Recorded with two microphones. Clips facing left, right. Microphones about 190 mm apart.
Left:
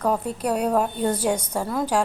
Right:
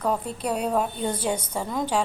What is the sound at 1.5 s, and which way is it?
Speech, 5° left (ahead or behind).